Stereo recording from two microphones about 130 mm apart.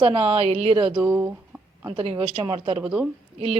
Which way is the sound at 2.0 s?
50° right (ahead or behind).